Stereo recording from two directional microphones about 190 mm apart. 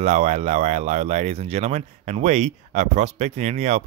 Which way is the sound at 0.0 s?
35° right (ahead or behind).